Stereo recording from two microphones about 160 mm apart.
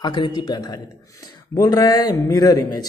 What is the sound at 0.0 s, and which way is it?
A man's voice, 30° left (ahead or behind).